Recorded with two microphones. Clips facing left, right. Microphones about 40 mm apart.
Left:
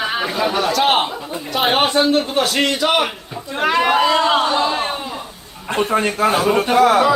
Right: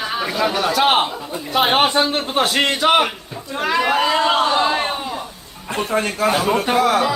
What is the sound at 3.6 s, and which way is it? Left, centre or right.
Speech, centre.